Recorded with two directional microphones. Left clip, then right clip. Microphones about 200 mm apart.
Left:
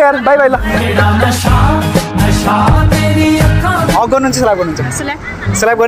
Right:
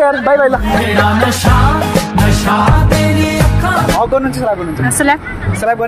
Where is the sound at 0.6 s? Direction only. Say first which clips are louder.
Right 1 dB; centre (ahead or behind).